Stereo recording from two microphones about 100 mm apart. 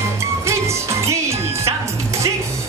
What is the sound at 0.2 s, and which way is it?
Music, 30° right (ahead or behind).